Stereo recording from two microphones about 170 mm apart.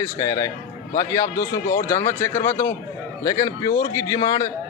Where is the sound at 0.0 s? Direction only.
20° left (ahead or behind).